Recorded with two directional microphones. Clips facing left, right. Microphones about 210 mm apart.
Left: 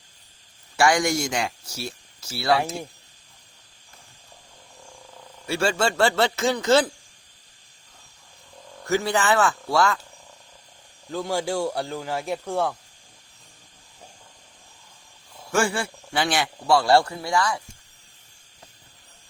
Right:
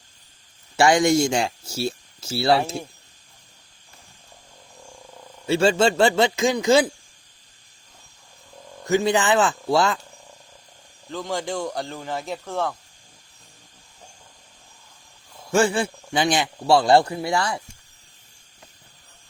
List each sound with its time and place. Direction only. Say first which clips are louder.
0.8 s a man's voice: right 4 dB; 25° right (ahead or behind)
5.5 s a man's voice: right 5 dB; 20° right (ahead or behind)
8.8 s a man's voice: right 3 dB; 20° right (ahead or behind)
11.1 s speech: left 2 dB; 10° left (ahead or behind)
15.5 s a man's voice: right 4 dB; 20° right (ahead or behind)